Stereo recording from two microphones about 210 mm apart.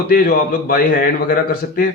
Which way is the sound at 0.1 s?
45° left (ahead or behind).